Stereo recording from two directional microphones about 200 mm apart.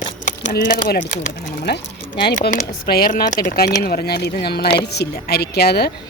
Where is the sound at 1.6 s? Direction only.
55° left (ahead or behind).